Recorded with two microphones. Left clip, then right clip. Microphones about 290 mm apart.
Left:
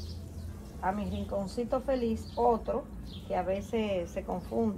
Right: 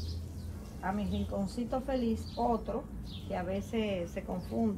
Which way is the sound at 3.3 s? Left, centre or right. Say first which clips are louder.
Left 5 dB; centre.